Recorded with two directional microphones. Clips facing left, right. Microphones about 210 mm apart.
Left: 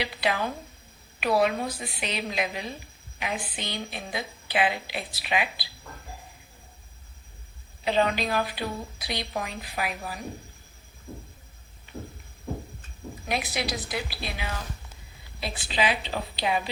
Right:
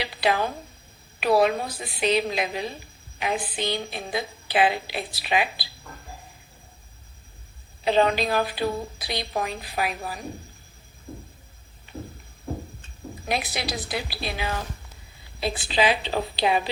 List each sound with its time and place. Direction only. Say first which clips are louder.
0.2 s a woman's voice: right 7 dB; 35° right (ahead or behind)
7.9 s a woman's voice: right 4 dB; 35° right (ahead or behind)
13.2 s a woman's voice: right 1 dB; 35° right (ahead or behind)